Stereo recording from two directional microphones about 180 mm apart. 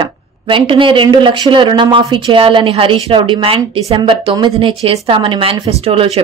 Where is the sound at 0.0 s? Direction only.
30° right (ahead or behind).